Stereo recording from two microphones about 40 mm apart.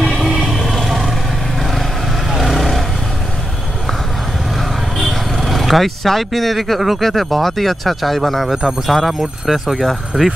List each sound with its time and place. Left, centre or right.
0.0 s vehicle: centre
4.6 s vehicle: centre
7.1 s speech: centre
10.1 s speech: centre